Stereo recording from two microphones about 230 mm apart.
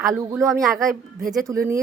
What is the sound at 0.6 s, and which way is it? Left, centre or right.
Speech, centre.